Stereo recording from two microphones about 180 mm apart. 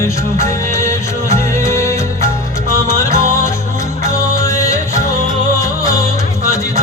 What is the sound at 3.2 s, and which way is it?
Music, 15° left (ahead or behind).